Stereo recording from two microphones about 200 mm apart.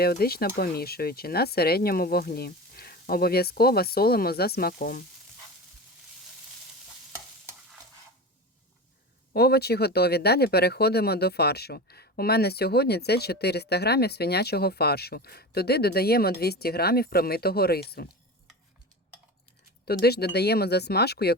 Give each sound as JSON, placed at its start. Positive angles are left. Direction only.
{"t": 0.0, "sound": "speech", "side_deg": 50}
{"t": 9.3, "sound": "speech", "side_deg": 50}
{"t": 19.8, "sound": "speech", "side_deg": 50}